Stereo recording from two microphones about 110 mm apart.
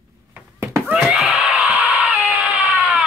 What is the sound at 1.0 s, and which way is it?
Screaming, 5° right (ahead or behind).